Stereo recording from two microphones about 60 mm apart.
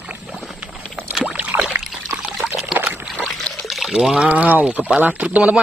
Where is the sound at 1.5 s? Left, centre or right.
Right.